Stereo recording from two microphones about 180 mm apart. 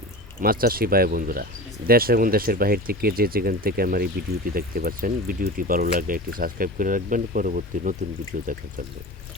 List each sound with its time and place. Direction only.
0.4 s speech: 55° right (ahead or behind)